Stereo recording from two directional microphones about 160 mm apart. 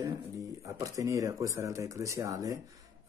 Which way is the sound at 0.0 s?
20° right (ahead or behind).